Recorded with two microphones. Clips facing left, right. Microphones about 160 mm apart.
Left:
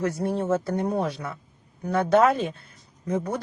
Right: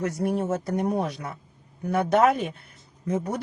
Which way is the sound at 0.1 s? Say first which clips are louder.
Right 1 dB; 25° left (ahead or behind).